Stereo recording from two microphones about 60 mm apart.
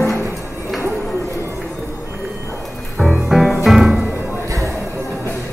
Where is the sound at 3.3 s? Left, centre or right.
Centre.